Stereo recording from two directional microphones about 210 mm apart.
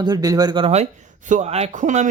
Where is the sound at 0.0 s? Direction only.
20° right (ahead or behind).